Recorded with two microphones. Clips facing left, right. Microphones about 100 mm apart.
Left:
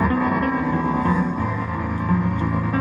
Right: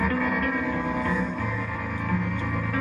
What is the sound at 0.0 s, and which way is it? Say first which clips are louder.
Music: left 5 dB; 30° left (ahead or behind).